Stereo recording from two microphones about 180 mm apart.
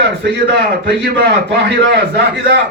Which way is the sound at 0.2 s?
70° right (ahead or behind).